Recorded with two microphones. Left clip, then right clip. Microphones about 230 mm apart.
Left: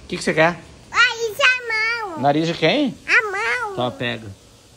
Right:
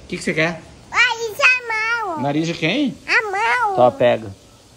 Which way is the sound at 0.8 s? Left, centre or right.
Centre.